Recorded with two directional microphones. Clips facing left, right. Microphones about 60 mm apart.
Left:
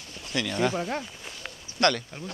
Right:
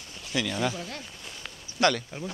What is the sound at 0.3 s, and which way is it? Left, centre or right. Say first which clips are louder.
Speech: even; centre.